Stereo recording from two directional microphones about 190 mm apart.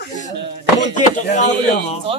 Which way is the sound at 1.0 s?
40° left (ahead or behind).